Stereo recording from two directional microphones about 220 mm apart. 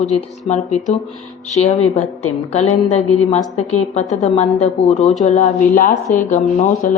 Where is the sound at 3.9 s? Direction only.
30° left (ahead or behind).